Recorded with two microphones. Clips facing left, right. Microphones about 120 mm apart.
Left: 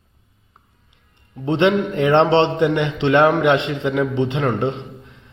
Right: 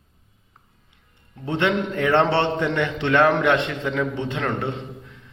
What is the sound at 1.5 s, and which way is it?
A man's voice, 20° left (ahead or behind).